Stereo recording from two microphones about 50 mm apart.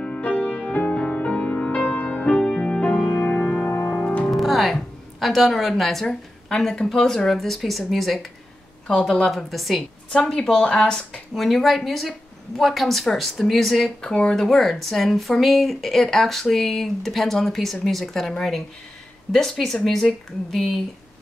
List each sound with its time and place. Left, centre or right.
0.0 s music: left
3.1 s music: left
3.6 s music: left
4.0 s music: left
4.3 s speech: centre
9.5 s a woman's voice: centre
11.3 s speech: centre
19.3 s a woman's voice: centre